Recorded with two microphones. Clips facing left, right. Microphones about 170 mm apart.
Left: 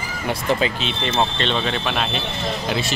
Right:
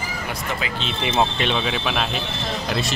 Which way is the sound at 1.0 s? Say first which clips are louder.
Right 1 dB; 10° right (ahead or behind).